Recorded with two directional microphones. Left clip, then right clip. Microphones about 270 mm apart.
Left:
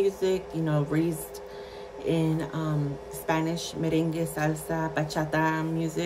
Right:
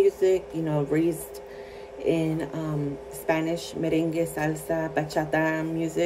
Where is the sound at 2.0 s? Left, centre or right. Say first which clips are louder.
Right 2 dB; left.